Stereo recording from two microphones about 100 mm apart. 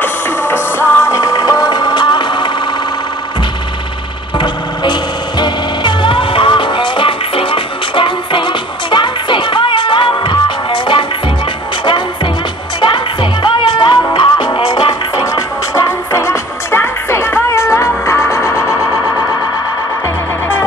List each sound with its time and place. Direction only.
0.0 s music: 20° left (ahead or behind); by 2.5 s 50° left (ahead or behind)
5.4 s music: 55° left (ahead or behind)
12.9 s music: 55° left (ahead or behind)
15.1 s music: 35° left (ahead or behind)